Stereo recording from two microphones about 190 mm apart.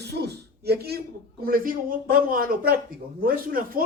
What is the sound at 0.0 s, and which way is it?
Speech, 60° right (ahead or behind).